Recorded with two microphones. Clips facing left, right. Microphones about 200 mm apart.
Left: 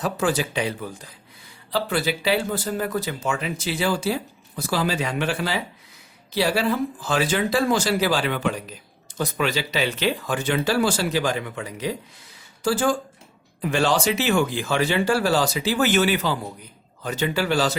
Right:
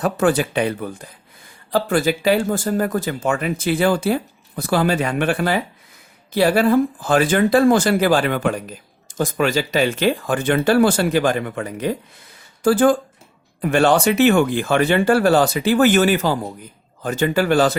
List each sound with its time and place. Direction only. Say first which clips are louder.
0.0 s speech: right 6 dB; 55° right (ahead or behind)